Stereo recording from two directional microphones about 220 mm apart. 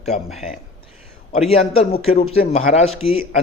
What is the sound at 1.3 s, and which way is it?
Speech, 30° left (ahead or behind).